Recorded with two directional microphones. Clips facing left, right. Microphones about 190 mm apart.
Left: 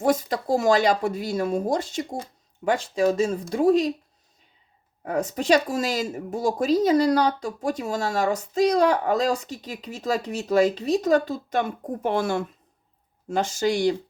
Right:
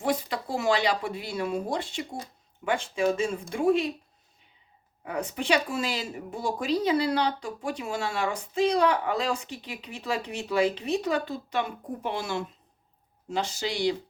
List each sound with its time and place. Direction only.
0.0 s speech: 45° left (ahead or behind)
5.0 s speech: 40° left (ahead or behind)